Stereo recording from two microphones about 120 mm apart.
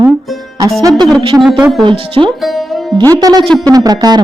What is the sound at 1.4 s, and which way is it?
Speech, 5° right (ahead or behind).